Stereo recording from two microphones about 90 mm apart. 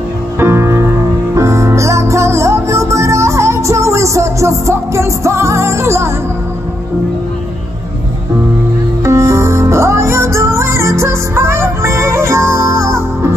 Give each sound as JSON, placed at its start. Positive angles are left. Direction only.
{"t": 0.4, "sound": "music", "side_deg": -30}
{"t": 9.0, "sound": "music", "side_deg": -30}